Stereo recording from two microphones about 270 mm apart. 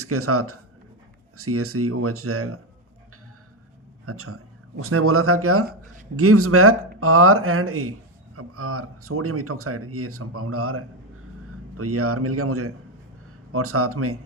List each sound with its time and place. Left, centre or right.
0.0 s speech: right
4.0 s speech: right